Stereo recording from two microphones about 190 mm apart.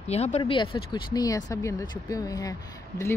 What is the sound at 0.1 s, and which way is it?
Speech, 35° left (ahead or behind).